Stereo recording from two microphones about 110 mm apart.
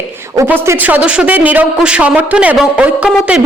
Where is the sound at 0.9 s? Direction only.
10° right (ahead or behind).